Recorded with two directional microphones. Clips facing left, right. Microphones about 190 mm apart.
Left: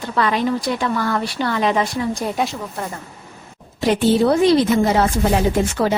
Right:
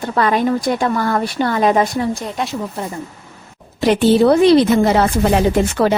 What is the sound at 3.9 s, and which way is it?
A woman's voice, 70° right (ahead or behind).